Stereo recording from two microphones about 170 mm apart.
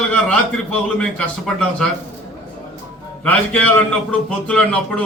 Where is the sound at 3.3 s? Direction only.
5° left (ahead or behind).